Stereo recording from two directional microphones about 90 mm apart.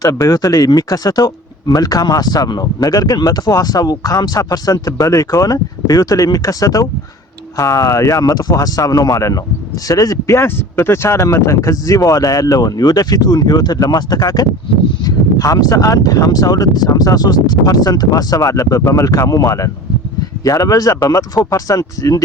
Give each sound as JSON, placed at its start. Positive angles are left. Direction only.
{"t": 0.0, "sound": "speech", "side_deg": 40}
{"t": 10.3, "sound": "speech", "side_deg": 25}